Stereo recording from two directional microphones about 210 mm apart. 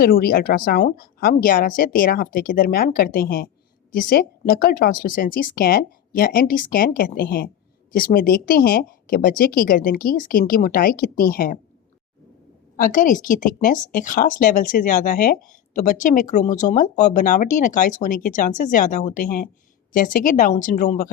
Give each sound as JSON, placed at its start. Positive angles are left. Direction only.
{"t": 0.0, "sound": "speech", "side_deg": 45}
{"t": 12.7, "sound": "speech", "side_deg": 40}